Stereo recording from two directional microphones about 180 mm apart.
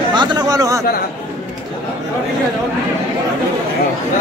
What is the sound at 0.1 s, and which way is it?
Speech, 25° right (ahead or behind).